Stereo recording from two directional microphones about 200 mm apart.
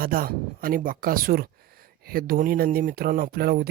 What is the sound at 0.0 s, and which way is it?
Speech, 45° right (ahead or behind).